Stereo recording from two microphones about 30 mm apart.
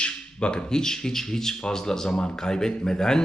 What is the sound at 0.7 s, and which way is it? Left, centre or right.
Speech, left.